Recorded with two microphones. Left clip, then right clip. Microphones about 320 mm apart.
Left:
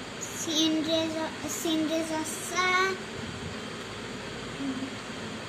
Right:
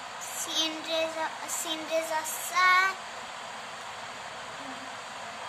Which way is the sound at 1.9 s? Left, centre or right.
Right.